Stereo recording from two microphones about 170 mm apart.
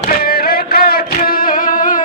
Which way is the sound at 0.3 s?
65° left (ahead or behind).